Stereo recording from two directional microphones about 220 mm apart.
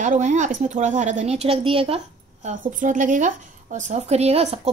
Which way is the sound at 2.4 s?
35° right (ahead or behind).